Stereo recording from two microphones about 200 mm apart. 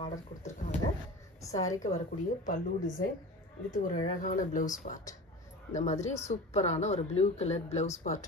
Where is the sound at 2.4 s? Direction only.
40° left (ahead or behind).